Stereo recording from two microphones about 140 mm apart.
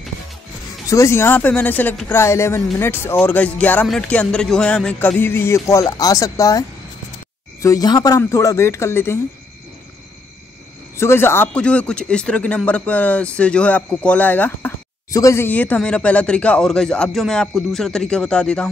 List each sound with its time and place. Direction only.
0.8 s speech: 20° left (ahead or behind)
7.6 s speech: 25° left (ahead or behind)
11.0 s speech: 20° left (ahead or behind)
15.0 s speech: 25° left (ahead or behind); by 18.7 s 5° left (ahead or behind)